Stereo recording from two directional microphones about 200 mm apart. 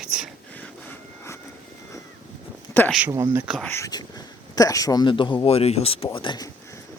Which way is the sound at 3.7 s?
15° left (ahead or behind).